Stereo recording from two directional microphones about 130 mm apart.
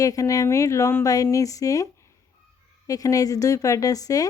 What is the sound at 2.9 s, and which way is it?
A woman's voice, 25° left (ahead or behind).